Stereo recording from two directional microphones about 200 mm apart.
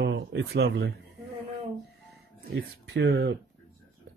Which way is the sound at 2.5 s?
60° right (ahead or behind).